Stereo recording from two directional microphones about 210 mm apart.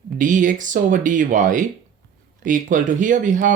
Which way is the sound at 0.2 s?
40° right (ahead or behind).